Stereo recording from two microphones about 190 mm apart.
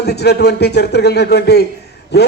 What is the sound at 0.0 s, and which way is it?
A man's voice, 60° left (ahead or behind).